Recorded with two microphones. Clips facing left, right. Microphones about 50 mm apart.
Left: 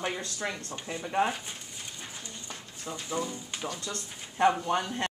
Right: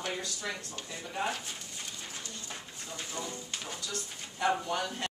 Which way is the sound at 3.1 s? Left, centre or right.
Left.